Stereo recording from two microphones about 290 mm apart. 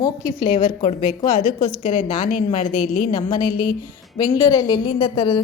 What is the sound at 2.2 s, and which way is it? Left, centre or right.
Speech, left.